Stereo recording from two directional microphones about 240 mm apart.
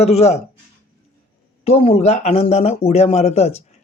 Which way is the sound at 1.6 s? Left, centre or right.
Left.